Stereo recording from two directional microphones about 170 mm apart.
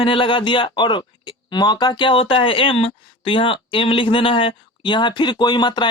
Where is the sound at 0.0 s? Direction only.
30° left (ahead or behind).